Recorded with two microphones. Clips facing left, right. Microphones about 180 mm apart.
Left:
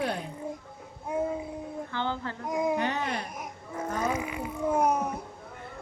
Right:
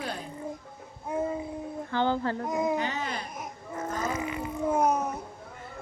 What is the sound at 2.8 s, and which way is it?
Speech, 60° left (ahead or behind).